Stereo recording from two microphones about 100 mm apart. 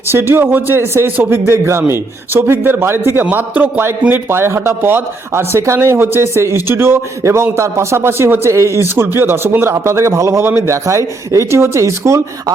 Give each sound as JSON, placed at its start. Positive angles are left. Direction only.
{"t": 0.1, "sound": "a man's voice", "side_deg": -25}